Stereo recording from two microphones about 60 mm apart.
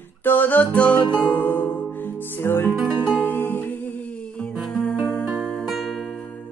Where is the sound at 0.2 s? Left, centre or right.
Left.